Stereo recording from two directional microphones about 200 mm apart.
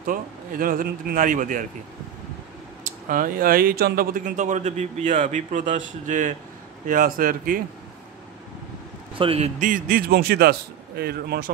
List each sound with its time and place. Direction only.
0.0 s a man's voice: 45° right (ahead or behind)
2.8 s a man's voice: 45° right (ahead or behind)
9.2 s a man's voice: 30° right (ahead or behind); by 11.5 s 50° right (ahead or behind)